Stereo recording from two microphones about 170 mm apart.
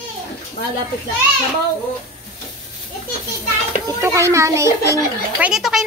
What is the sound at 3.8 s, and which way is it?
A child's voice, 15° right (ahead or behind).